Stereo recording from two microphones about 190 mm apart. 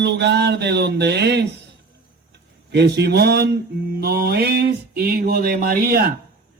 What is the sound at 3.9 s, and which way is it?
A man's voice, 55° right (ahead or behind).